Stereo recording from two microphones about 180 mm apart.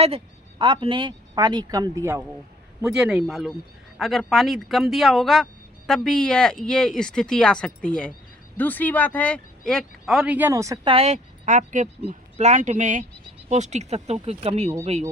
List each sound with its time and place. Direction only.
0.6 s speech: 30° right (ahead or behind)
2.8 s speech: 5° right (ahead or behind)
10.9 s speech: 40° right (ahead or behind)